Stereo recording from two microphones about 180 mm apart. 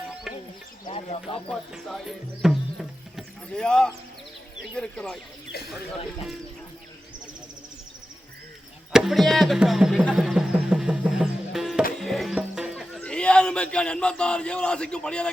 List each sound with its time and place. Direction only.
0.3 s music: centre (ahead or behind)
0.9 s speech: 30° left (ahead or behind)
1.5 s speech: centre (ahead or behind)
8.9 s a sound: 5° right (ahead or behind)
11.9 s music: centre (ahead or behind)
12.4 s speech: 5° right (ahead or behind)